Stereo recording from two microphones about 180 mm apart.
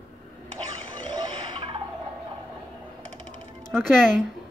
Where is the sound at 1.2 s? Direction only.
25° right (ahead or behind).